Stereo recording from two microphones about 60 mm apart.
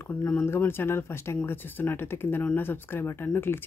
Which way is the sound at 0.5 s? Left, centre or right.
Left.